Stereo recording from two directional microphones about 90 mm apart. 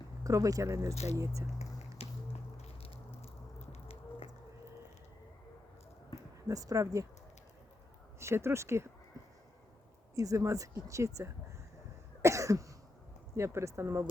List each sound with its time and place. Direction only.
0.3 s speech: 40° right (ahead or behind)
2.0 s music: 90° left
6.5 s speech: 40° right (ahead or behind)
8.2 s speech: 30° right (ahead or behind)
10.2 s speech: 35° right (ahead or behind)
12.2 s cough: 35° right (ahead or behind)
13.3 s speech: 30° right (ahead or behind)